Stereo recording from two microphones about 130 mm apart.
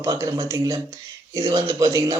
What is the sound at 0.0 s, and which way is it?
Speech, 25° right (ahead or behind).